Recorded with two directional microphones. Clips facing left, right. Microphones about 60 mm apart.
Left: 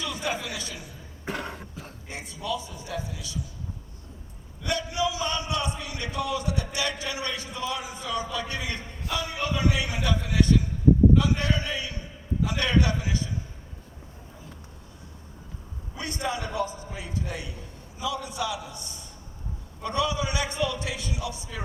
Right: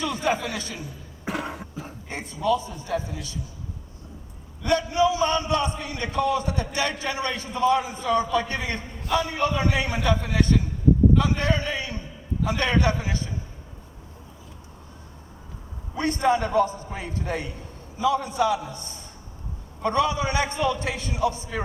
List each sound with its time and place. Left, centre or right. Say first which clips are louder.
0.0 s a man's voice: right 6 dB; right
1.2 s cough: right 3 dB; centre
2.0 s a man's voice: right 8 dB; right
4.6 s a man's voice: right 7 dB; right
16.0 s a man's voice: right 9 dB; right